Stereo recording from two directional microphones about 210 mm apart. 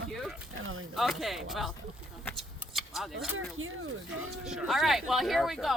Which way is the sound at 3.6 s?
70° right (ahead or behind).